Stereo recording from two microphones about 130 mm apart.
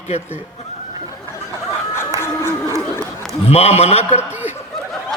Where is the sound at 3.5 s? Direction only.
55° left (ahead or behind).